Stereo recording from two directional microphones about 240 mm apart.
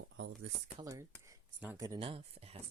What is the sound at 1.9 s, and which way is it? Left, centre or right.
Speech, right.